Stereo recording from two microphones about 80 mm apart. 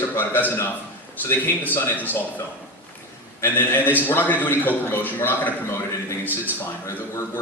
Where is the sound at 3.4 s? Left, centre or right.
Left.